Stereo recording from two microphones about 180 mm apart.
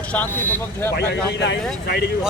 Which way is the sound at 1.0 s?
70° left (ahead or behind).